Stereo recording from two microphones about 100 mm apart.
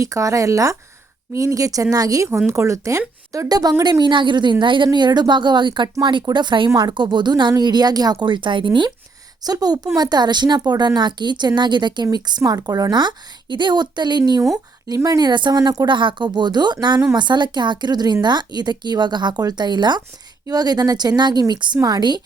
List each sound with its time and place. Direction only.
0.0 s a woman's voice: 35° right (ahead or behind); by 8.9 s 50° right (ahead or behind)
9.4 s a woman's voice: 40° right (ahead or behind)
15.9 s speech: 55° right (ahead or behind)